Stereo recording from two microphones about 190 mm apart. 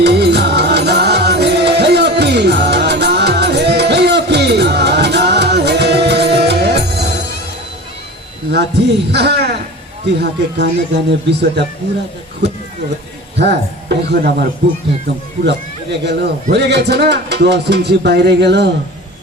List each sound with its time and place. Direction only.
0.0 s music: 60° right (ahead or behind)
9.1 s a man's voice: 60° right (ahead or behind)
12.4 s a sound: 65° right (ahead or behind)
13.3 s a man's voice: 60° right (ahead or behind)